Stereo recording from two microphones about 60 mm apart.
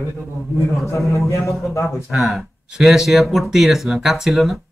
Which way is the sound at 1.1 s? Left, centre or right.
Left.